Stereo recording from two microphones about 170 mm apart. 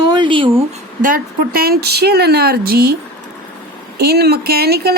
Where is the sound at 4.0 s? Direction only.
65° right (ahead or behind).